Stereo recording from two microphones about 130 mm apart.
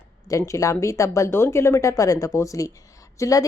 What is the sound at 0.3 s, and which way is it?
A woman's voice, 25° left (ahead or behind).